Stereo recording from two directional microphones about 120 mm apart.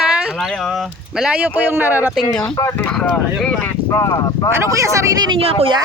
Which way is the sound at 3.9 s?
30° left (ahead or behind).